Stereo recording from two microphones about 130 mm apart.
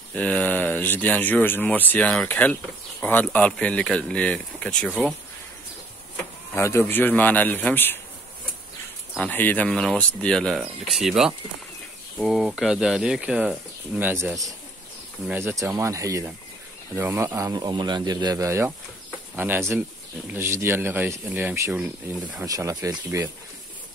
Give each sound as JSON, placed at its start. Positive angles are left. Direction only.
{"t": 0.1, "sound": "speech", "side_deg": 10}
{"t": 6.5, "sound": "speech", "side_deg": 20}
{"t": 9.2, "sound": "speech", "side_deg": 15}
{"t": 15.3, "sound": "speech", "side_deg": -20}